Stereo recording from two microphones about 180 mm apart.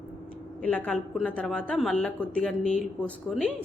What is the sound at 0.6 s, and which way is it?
A woman's voice, 10° left (ahead or behind).